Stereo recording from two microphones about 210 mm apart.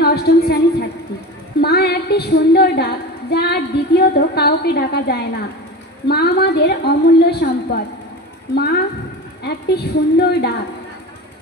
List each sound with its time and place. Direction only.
0.0 s a sound: 50° left (ahead or behind)
1.6 s female singing: 50° left (ahead or behind)
6.0 s a woman's voice: 50° left (ahead or behind)